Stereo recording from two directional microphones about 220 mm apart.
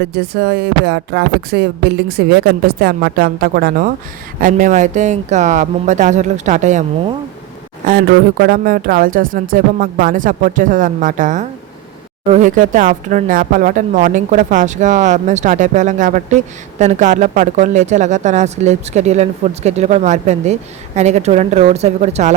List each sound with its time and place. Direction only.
0.0 s speech: 50° right (ahead or behind)
7.9 s speech: 40° right (ahead or behind)